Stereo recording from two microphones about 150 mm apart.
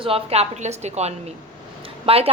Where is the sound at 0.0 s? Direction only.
40° right (ahead or behind).